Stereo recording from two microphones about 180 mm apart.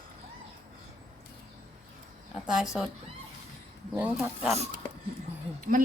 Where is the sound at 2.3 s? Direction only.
5° right (ahead or behind).